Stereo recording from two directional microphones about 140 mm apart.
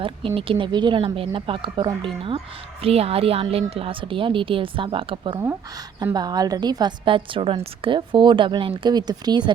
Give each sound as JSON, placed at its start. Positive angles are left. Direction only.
{"t": 0.0, "sound": "a woman's voice", "side_deg": -40}